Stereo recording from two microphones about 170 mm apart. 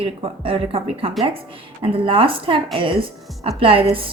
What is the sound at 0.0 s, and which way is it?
A woman's voice, 30° right (ahead or behind).